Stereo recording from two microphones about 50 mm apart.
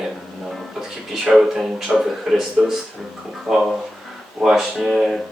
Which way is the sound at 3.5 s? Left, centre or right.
Centre.